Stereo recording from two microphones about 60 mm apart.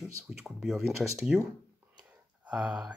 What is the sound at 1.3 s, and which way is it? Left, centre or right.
Speech, centre.